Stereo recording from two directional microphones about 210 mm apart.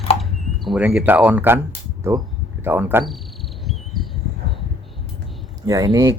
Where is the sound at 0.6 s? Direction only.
5° right (ahead or behind).